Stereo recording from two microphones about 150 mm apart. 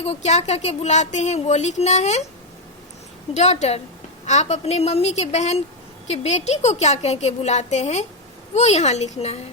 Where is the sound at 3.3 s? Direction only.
50° left (ahead or behind).